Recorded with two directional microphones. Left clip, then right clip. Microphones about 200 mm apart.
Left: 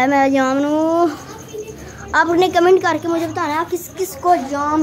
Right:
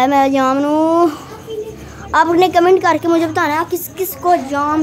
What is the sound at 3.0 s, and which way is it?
Speech, 40° right (ahead or behind).